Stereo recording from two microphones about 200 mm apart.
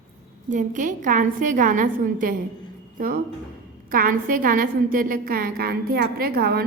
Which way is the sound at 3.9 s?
45° right (ahead or behind).